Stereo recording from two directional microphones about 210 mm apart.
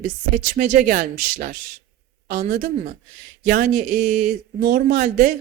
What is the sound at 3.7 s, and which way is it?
Speech, 90° right.